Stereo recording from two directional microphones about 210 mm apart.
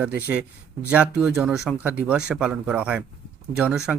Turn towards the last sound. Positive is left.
turn(degrees=-5)  # may be behind; listen again after turning